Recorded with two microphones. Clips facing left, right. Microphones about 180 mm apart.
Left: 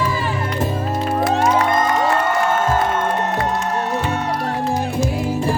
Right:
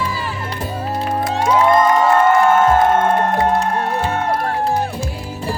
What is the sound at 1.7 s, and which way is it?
Music, 55° right (ahead or behind).